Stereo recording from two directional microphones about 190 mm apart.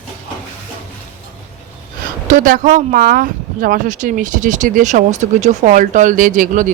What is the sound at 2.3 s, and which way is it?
Speech, 45° right (ahead or behind).